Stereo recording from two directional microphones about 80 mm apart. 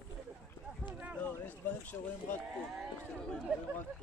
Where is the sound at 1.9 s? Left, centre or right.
Left.